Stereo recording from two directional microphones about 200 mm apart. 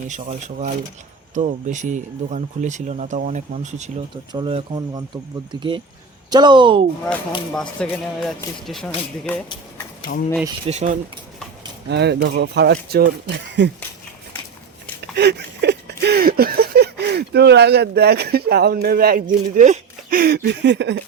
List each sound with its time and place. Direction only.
0.1 s speech: 35° right (ahead or behind)
4.3 s speech: 25° right (ahead or behind)
7.5 s speech: 5° left (ahead or behind)
10.1 s speech: 45° left (ahead or behind)
10.7 s speech: 35° right (ahead or behind)
11.9 s speech: 55° right (ahead or behind)
15.1 s a sound: 55° right (ahead or behind)